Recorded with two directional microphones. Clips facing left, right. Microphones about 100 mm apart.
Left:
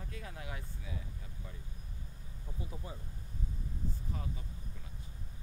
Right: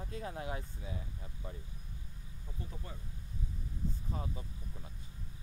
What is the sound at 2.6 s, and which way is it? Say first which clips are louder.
Speech: left 2 dB; 15° left (ahead or behind).